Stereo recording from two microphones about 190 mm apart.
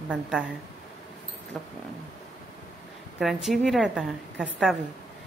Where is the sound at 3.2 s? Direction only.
Centre (ahead or behind).